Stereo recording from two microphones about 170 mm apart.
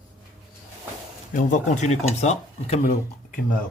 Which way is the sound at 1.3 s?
45° left (ahead or behind).